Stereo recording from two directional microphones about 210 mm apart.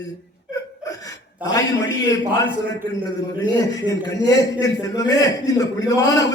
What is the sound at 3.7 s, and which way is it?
A man's voice, 15° left (ahead or behind).